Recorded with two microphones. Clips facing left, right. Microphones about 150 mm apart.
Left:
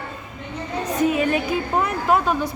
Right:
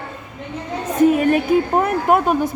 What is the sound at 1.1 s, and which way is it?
A woman's voice, 50° right (ahead or behind).